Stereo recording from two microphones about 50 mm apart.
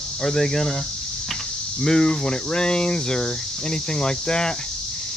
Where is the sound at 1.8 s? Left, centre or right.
Centre.